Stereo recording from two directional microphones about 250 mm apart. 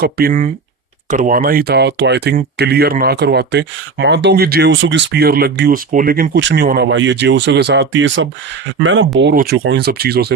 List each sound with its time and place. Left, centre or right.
0.0 s speech: right